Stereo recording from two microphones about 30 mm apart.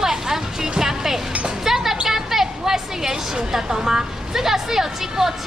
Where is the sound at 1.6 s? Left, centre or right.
Centre.